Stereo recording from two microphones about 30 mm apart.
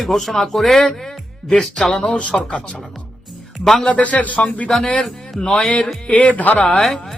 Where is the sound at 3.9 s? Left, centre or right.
Left.